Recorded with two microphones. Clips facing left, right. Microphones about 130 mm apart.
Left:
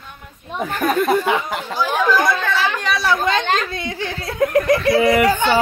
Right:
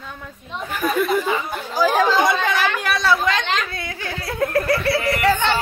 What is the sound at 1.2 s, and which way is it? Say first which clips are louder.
Speech: left 3 dB; 85° left.